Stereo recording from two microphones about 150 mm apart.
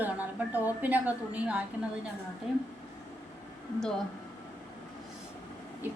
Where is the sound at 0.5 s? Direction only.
10° right (ahead or behind).